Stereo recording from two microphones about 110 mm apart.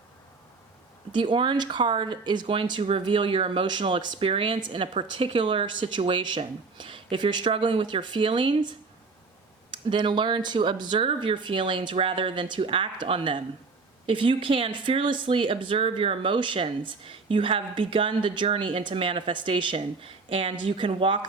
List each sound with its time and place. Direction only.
1.1 s speech: 45° right (ahead or behind)
9.7 s speech: 45° right (ahead or behind)